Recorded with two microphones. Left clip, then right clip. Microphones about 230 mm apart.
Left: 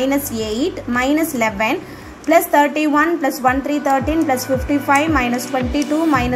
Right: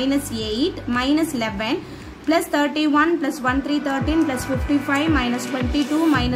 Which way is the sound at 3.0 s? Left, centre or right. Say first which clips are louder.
Left 3 dB; centre.